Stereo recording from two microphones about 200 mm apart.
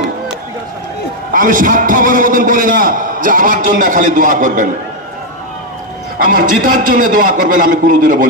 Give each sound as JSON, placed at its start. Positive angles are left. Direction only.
{"t": 1.3, "sound": "a man's voice", "side_deg": -45}
{"t": 6.2, "sound": "a man's voice", "side_deg": -40}